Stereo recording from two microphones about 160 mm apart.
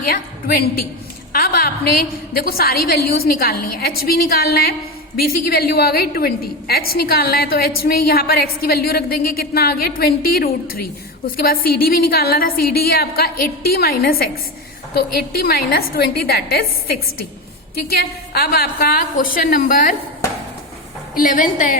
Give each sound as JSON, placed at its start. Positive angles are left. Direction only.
{"t": 0.1, "sound": "a woman's voice", "side_deg": 70}
{"t": 21.2, "sound": "a woman's voice", "side_deg": 55}